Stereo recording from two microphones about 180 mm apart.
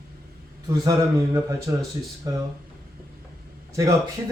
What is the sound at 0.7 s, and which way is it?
A man's voice, 20° right (ahead or behind).